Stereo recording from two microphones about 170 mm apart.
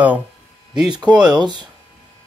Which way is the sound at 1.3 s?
25° right (ahead or behind).